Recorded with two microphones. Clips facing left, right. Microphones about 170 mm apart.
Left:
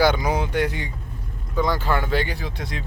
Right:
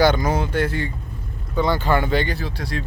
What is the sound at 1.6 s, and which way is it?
Speech, centre (ahead or behind).